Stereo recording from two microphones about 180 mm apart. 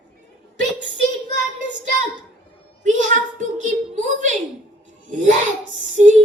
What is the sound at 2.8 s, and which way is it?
A woman's voice, 45° right (ahead or behind).